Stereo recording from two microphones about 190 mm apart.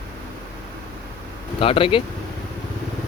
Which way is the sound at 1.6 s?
30° left (ahead or behind).